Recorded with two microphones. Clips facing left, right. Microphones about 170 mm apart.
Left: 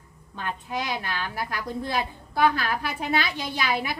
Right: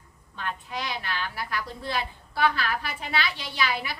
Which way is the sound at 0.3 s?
45° left (ahead or behind).